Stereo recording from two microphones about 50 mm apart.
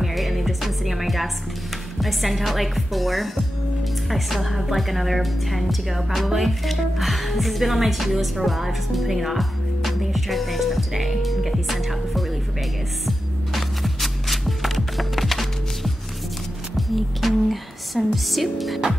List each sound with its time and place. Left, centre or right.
0.0 s music: centre
2.0 s speech: centre
13.0 s music: centre